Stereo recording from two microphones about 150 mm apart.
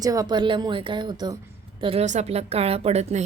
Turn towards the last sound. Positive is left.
turn(degrees=-45)  # may be behind; listen again after turning